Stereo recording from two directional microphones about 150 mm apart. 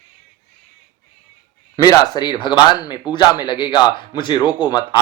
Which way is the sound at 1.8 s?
25° left (ahead or behind).